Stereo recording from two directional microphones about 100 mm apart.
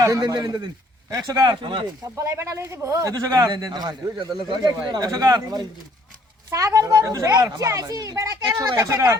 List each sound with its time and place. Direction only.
0.0 s speech: 30° right (ahead or behind)
0.3 s speech: 45° right (ahead or behind)